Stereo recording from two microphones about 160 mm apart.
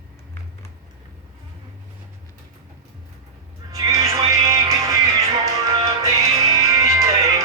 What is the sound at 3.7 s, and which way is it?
Music, 20° right (ahead or behind).